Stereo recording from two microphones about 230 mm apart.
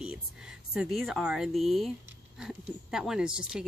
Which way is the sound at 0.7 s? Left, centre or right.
Centre.